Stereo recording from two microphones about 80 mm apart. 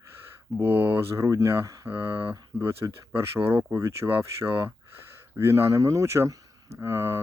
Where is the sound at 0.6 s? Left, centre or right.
Right.